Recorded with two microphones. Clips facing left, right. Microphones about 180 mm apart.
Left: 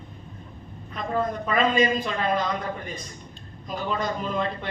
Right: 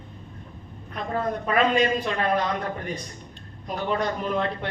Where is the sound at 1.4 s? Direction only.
65° right (ahead or behind).